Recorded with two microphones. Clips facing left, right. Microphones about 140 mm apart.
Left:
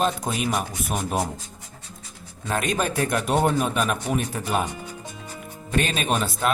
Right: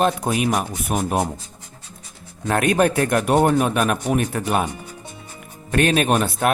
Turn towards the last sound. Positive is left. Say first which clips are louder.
# right 5 dB
turn(degrees=-55)  # may be behind; listen again after turning